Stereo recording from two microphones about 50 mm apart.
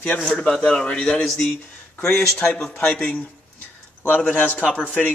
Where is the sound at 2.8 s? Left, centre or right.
Left.